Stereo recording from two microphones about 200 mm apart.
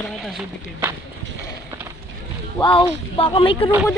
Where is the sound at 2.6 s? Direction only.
25° left (ahead or behind).